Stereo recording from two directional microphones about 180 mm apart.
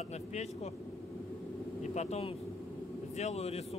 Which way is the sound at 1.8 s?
40° left (ahead or behind).